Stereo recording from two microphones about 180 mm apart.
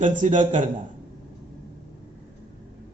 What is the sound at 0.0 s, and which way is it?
Speech, 45° right (ahead or behind).